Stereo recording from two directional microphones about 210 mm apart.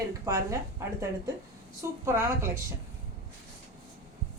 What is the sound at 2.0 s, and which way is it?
Speech, 15° right (ahead or behind).